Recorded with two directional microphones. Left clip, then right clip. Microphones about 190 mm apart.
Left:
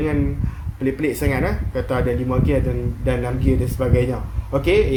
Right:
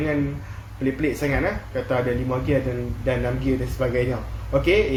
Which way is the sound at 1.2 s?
45° left (ahead or behind).